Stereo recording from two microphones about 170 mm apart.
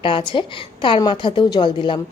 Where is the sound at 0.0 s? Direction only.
30° left (ahead or behind).